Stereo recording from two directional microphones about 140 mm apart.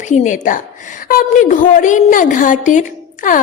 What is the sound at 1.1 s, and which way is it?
A woman's voice, 80° left.